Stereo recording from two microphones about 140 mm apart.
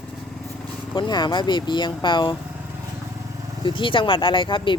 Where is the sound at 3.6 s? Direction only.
35° left (ahead or behind).